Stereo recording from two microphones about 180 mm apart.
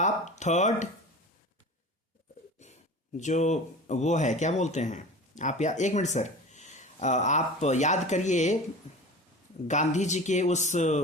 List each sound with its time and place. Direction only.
0.0 s a sound: 40° left (ahead or behind)
3.2 s speech: 40° left (ahead or behind)
9.6 s speech: 40° left (ahead or behind)